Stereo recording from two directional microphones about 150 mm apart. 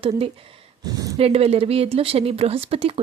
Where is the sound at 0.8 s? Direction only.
25° right (ahead or behind).